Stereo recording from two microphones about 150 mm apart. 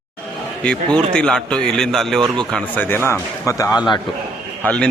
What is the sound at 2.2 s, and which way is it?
Speech, 30° right (ahead or behind).